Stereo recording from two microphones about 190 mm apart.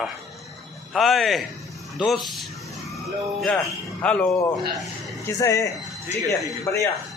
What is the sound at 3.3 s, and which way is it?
A man's voice, 5° left (ahead or behind).